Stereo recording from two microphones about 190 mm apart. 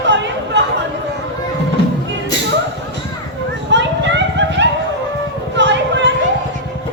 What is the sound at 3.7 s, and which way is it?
Children playing, 70° right (ahead or behind).